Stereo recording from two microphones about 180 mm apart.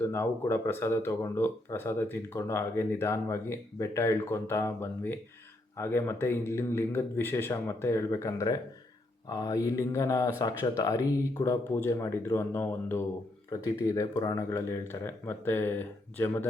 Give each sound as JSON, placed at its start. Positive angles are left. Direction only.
{"t": 0.0, "sound": "speech", "side_deg": 15}